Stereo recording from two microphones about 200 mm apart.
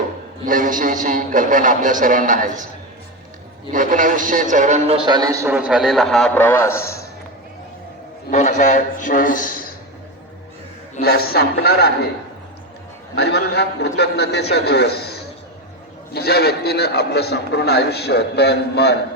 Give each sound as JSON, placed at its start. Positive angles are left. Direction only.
{"t": 0.4, "sound": "a man's voice", "side_deg": -40}
{"t": 3.7, "sound": "a man's voice", "side_deg": -40}
{"t": 8.3, "sound": "a man's voice", "side_deg": 35}
{"t": 11.0, "sound": "a man's voice", "side_deg": 50}
{"t": 13.1, "sound": "a man's voice", "side_deg": 55}